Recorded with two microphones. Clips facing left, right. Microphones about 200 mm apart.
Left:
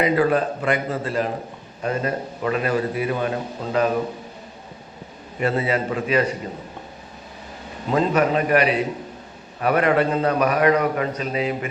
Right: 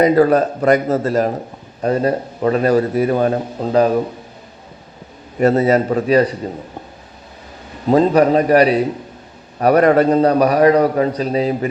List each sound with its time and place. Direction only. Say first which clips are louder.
0.0 s a man's voice: right 7 dB; 40° right (ahead or behind)
5.4 s a man's voice: right 9 dB; 40° right (ahead or behind)
7.9 s a man's voice: right 7 dB; 35° right (ahead or behind)